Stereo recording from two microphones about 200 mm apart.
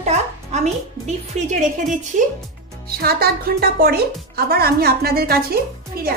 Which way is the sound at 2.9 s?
50° right (ahead or behind).